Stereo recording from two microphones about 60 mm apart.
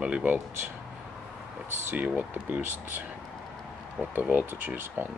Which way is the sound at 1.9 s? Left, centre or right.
Right.